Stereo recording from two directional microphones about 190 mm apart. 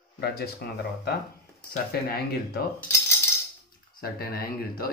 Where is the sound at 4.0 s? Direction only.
50° left (ahead or behind).